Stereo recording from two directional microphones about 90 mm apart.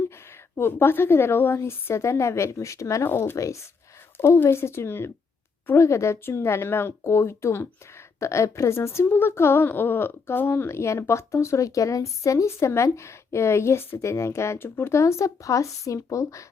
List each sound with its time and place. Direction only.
0.5 s a woman's voice: 25° left (ahead or behind)